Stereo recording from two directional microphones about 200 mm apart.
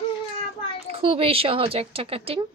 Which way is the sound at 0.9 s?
30° right (ahead or behind).